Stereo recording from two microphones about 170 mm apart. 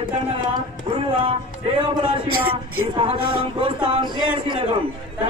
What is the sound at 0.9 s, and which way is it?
A man's voice, 30° right (ahead or behind).